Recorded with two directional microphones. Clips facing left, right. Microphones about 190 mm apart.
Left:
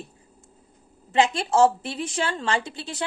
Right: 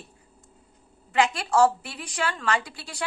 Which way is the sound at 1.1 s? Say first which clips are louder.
Left 2 dB; 25° left (ahead or behind).